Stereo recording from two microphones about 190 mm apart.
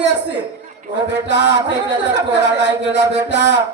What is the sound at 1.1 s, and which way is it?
Speech, 65° right (ahead or behind).